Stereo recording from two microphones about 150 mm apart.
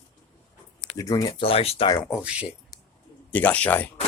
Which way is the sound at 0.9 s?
25° left (ahead or behind).